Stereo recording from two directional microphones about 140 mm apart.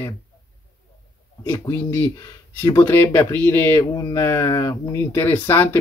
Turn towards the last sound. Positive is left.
turn(degrees=15)  # may be behind; listen again after turning